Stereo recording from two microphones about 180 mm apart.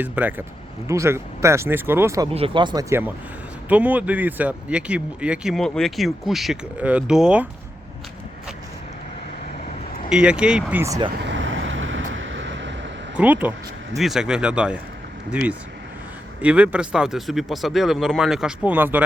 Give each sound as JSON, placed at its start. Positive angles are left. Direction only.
{"t": 0.0, "sound": "speech", "side_deg": -10}
{"t": 2.3, "sound": "speech", "side_deg": -30}
{"t": 3.7, "sound": "speech", "side_deg": -10}
{"t": 10.1, "sound": "speech", "side_deg": -5}
{"t": 11.2, "sound": "vehicle", "side_deg": -90}
{"t": 13.1, "sound": "speech", "side_deg": -10}